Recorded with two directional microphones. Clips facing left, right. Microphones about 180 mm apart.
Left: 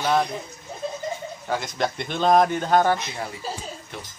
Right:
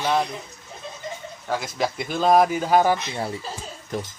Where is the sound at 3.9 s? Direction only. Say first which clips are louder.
Right 13 dB; 40° right (ahead or behind).